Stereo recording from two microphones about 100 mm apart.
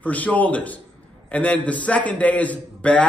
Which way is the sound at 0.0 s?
15° left (ahead or behind).